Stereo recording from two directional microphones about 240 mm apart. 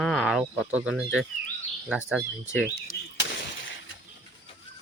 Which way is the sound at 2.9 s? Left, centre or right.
Left.